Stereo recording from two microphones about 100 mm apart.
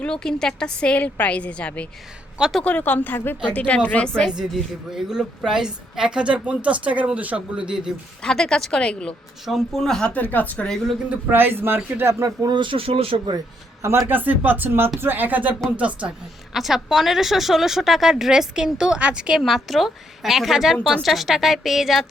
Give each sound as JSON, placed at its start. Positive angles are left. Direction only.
{"t": 0.0, "sound": "a woman's voice", "side_deg": 10}
{"t": 2.4, "sound": "a woman's voice", "side_deg": 0}
{"t": 2.6, "sound": "a woman's voice", "side_deg": 15}
{"t": 4.9, "sound": "a woman's voice", "side_deg": -5}
{"t": 8.2, "sound": "a woman's voice", "side_deg": 5}
{"t": 10.3, "sound": "a woman's voice", "side_deg": 15}
{"t": 11.1, "sound": "speech", "side_deg": -20}
{"t": 12.4, "sound": "speech", "side_deg": -50}
{"t": 14.1, "sound": "a woman's voice", "side_deg": -20}
{"t": 20.7, "sound": "a woman's voice", "side_deg": 10}
{"t": 21.0, "sound": "a woman's voice", "side_deg": 0}